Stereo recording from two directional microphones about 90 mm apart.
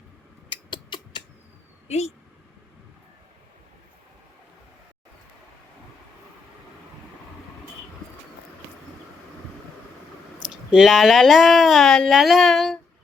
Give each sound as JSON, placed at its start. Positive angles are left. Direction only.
{"t": 0.5, "sound": "beatboxing", "side_deg": 60}
{"t": 10.4, "sound": "speech", "side_deg": -10}